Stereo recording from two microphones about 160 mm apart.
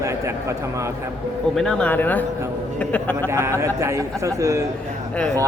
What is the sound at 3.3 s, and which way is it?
A man's voice, 15° right (ahead or behind).